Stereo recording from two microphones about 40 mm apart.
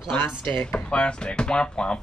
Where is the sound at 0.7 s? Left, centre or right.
Left.